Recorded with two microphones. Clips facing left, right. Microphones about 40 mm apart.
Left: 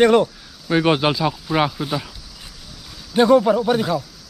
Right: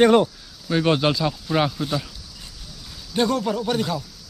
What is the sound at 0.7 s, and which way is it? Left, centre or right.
Speech, centre.